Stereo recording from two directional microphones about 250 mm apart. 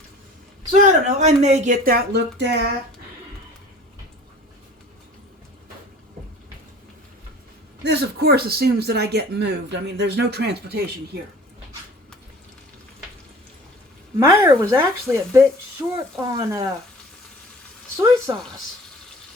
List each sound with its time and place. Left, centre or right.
1.2 s speech: right
7.9 s speech: right
14.2 s speech: centre
17.9 s speech: centre